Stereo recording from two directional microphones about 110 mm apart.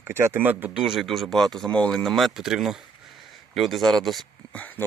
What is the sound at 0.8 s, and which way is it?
Speech, centre (ahead or behind).